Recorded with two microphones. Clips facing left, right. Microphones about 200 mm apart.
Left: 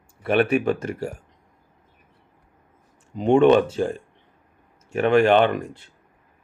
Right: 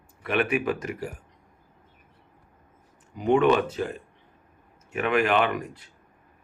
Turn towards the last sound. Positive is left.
turn(degrees=25)  # may be behind; listen again after turning